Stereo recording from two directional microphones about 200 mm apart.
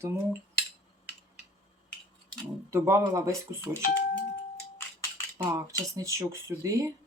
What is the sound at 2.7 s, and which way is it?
Speech, 15° right (ahead or behind).